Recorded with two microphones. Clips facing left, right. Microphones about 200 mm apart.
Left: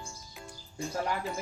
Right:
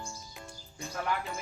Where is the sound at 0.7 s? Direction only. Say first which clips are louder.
Left 4 dB; 30° left (ahead or behind).